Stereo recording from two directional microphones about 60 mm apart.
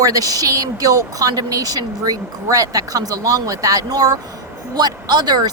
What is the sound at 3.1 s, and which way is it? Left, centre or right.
Speech, right.